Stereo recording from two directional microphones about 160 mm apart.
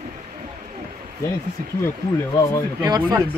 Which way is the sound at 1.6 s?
60° right (ahead or behind).